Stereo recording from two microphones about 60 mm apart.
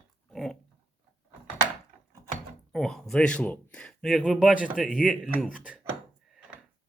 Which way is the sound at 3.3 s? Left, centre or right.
Left.